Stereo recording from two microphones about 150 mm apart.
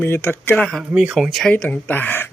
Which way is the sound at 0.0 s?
15° left (ahead or behind).